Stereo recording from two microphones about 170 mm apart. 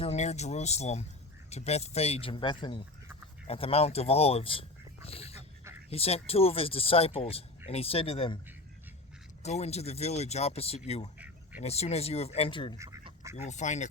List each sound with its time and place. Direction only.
0.0 s speech: 40° left (ahead or behind)
5.0 s a sound: 35° left (ahead or behind)
5.9 s speech: 35° left (ahead or behind)
9.4 s speech: 40° left (ahead or behind)
13.3 s speech: 40° left (ahead or behind)